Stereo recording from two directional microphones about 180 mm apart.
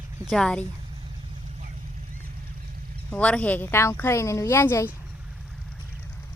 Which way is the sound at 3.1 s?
5° left (ahead or behind).